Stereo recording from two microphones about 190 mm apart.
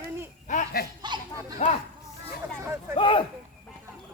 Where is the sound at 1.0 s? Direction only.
25° right (ahead or behind).